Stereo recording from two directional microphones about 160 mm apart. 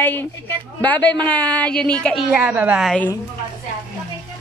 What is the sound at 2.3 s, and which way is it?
Speech, 10° right (ahead or behind).